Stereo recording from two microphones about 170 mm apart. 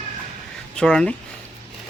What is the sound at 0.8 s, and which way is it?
Speech, 5° left (ahead or behind).